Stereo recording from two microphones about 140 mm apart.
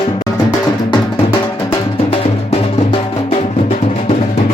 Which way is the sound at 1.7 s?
45° left (ahead or behind).